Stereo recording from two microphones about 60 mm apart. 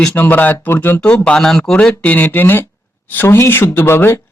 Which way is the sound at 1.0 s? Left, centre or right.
Centre.